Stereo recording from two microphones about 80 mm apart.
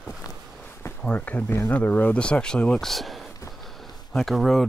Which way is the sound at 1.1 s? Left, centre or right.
Centre.